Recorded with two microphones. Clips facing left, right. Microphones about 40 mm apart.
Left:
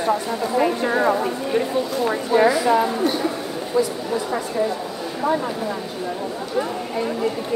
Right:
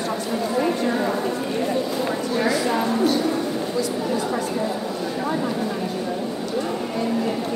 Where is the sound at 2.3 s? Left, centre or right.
Centre.